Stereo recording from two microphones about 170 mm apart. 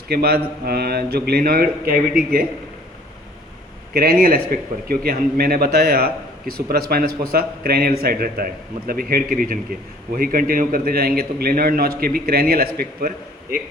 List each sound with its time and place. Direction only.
0.1 s a man's voice: 70° right (ahead or behind)
3.9 s a man's voice: 60° right (ahead or behind)